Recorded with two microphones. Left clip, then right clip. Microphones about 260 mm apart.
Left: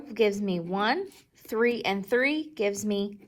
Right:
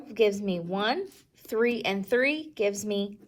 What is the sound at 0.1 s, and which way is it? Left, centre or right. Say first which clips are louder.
A woman's voice: right 1 dB; left.